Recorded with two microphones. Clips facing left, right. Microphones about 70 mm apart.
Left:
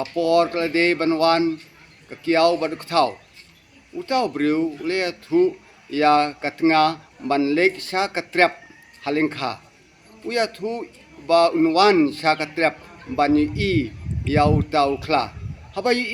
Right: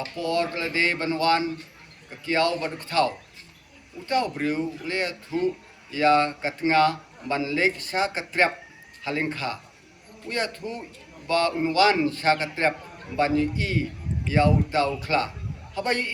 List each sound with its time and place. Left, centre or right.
0.2 s speech: left
9.0 s a man's voice: left